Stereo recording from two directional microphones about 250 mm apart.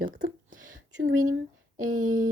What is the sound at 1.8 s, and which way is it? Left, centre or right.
Speech, right.